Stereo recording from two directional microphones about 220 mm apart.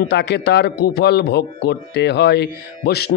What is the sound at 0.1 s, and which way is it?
Speech, 50° left (ahead or behind).